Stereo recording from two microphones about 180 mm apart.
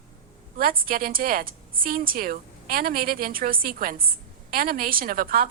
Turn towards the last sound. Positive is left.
turn(degrees=-50)  # may be behind; listen again after turning